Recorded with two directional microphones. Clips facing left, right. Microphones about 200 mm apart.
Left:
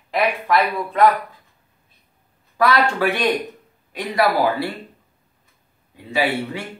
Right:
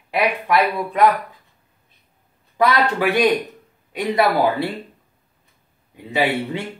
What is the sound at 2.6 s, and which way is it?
Speech, 20° right (ahead or behind).